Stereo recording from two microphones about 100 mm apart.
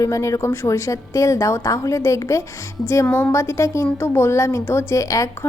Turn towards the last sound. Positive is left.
turn(degrees=35)  # may be behind; listen again after turning